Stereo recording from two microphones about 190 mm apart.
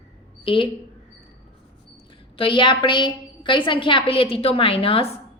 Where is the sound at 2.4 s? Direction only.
25° left (ahead or behind).